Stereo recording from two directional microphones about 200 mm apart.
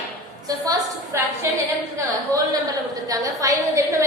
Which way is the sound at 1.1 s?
15° right (ahead or behind).